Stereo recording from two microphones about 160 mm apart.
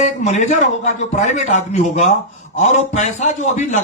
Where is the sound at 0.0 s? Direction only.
45° left (ahead or behind).